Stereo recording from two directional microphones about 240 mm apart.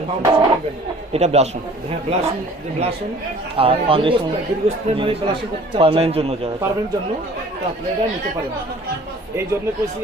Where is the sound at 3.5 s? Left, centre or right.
Right.